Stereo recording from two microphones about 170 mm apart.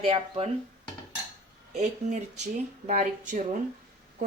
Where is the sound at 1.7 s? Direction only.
40° right (ahead or behind).